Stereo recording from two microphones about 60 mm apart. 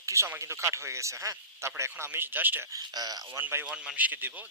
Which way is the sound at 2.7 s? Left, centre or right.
Right.